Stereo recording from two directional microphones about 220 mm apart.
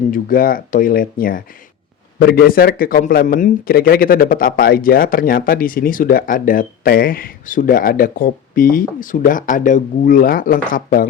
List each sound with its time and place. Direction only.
0.1 s a man's voice: 40° left (ahead or behind)